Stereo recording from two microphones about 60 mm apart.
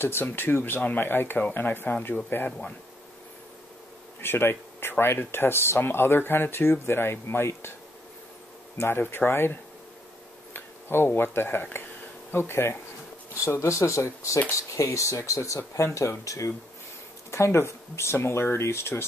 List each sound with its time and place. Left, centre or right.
0.0 s speech: left
4.2 s speech: left
8.7 s speech: left
13.5 s speech: left
17.3 s speech: left